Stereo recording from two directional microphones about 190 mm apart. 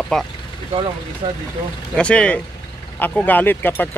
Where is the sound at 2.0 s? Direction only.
5° left (ahead or behind).